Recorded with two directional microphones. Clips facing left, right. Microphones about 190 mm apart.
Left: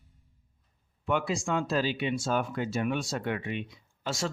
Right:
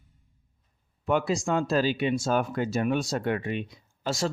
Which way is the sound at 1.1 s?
40° right (ahead or behind).